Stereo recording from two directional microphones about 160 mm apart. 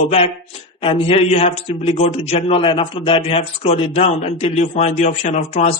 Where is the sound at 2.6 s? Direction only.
35° left (ahead or behind).